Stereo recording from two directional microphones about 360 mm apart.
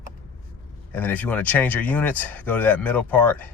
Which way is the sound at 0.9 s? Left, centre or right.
Centre.